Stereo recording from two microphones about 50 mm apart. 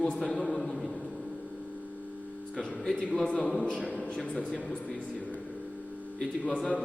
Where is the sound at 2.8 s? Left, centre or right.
Left.